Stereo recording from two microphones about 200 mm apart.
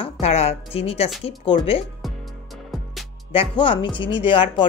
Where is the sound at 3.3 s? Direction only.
25° left (ahead or behind).